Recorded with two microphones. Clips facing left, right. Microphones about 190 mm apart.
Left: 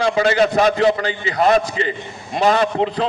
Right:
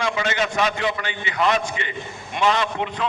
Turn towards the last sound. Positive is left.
turn(degrees=35)  # may be behind; listen again after turning